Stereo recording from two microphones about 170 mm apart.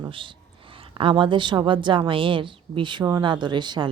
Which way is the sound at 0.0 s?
30° right (ahead or behind).